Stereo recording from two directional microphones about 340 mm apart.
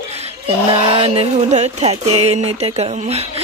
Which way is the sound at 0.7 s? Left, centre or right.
Centre.